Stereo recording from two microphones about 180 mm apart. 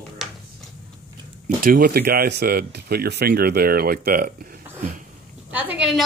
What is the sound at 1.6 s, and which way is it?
Speech, 55° right (ahead or behind).